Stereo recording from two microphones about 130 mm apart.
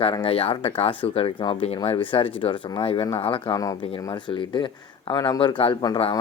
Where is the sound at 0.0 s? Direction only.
40° left (ahead or behind).